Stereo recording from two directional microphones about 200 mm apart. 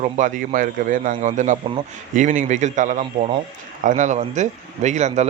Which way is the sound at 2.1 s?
40° right (ahead or behind).